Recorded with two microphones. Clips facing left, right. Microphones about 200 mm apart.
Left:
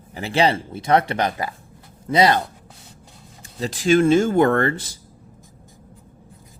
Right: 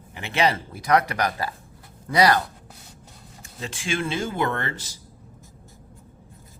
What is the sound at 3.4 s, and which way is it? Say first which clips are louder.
Speech: left 10 dB; 35° left (ahead or behind).